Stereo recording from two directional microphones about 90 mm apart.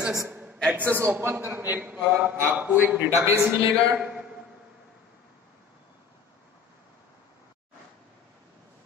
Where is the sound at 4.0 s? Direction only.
15° right (ahead or behind).